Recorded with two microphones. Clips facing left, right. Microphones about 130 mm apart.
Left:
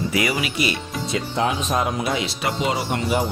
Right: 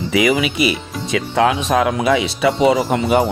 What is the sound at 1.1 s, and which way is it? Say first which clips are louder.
Speech: right 7 dB; 90° right.